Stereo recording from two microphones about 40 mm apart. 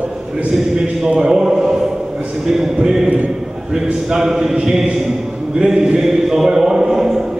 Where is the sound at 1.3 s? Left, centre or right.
Centre.